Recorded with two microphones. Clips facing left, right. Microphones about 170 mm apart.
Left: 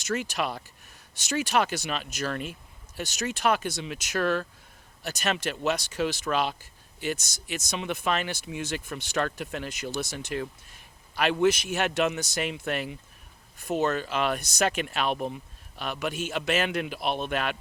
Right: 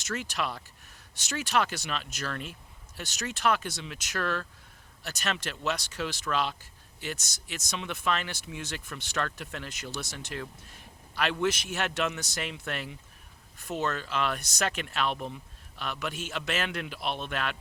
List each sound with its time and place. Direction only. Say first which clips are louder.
0.1 s speech: left 4 dB; 10° left (ahead or behind)